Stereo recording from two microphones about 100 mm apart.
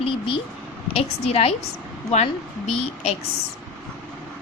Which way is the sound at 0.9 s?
90° left.